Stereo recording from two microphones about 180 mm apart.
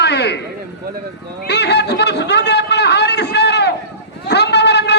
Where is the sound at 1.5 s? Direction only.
70° left (ahead or behind).